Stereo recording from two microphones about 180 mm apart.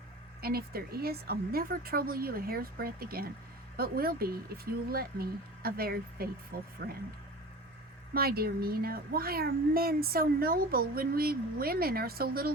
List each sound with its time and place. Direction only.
0.4 s speech: 60° right (ahead or behind)
8.1 s speech: 60° right (ahead or behind)